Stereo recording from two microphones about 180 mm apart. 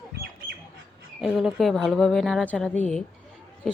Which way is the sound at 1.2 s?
Centre (ahead or behind).